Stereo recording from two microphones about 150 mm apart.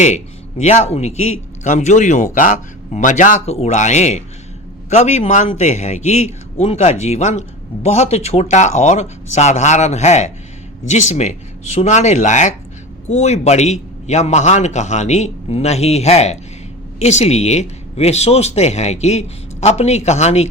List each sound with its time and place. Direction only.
0.6 s a man's voice: 50° left (ahead or behind)